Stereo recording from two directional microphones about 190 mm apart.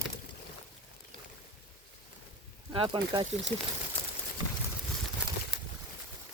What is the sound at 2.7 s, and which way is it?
Speech, 25° right (ahead or behind).